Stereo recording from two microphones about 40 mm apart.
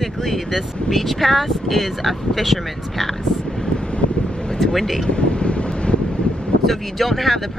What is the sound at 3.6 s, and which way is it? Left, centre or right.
Vehicle, left.